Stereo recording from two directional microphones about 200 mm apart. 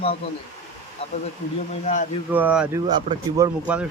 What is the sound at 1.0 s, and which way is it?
Speech, 25° left (ahead or behind).